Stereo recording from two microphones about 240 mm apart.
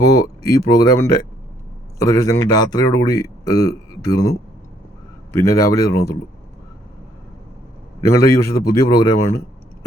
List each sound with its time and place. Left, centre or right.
0.0 s speech: centre
8.1 s speech: centre